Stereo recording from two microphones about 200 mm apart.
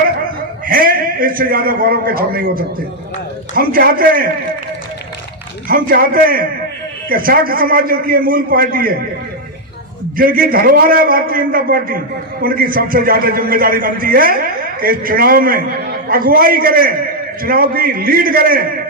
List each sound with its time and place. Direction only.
0.6 s a man's voice: 45° right (ahead or behind)
5.6 s a man's voice: 45° right (ahead or behind)
10.2 s a man's voice: 45° right (ahead or behind)